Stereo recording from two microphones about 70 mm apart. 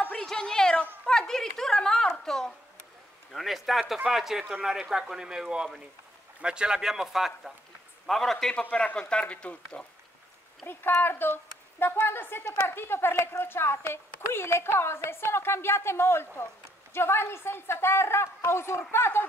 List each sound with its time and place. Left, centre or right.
0.1 s cat: centre
1.0 s a sound: centre
2.2 s a child's voice: centre
10.6 s a woman's voice: left